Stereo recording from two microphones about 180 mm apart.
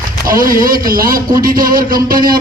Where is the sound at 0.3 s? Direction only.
50° right (ahead or behind).